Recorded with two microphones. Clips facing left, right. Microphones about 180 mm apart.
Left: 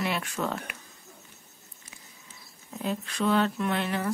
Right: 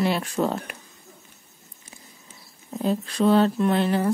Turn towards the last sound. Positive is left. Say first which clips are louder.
# right 7 dB
turn(degrees=-35)  # may be behind; listen again after turning